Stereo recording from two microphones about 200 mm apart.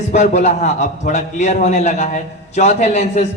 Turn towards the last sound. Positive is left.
turn(degrees=35)  # may be behind; listen again after turning